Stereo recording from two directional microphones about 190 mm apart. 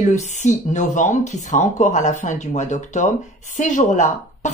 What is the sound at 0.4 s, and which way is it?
A man's voice, 40° left (ahead or behind).